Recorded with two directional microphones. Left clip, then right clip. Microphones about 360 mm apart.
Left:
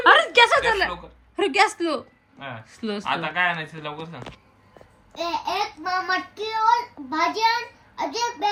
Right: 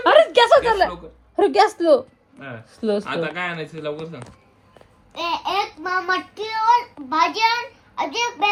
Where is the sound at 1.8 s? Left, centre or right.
Centre.